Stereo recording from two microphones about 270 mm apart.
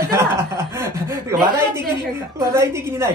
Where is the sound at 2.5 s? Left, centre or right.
Centre.